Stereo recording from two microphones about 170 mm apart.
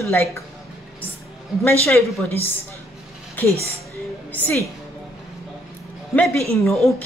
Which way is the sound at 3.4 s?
10° left (ahead or behind).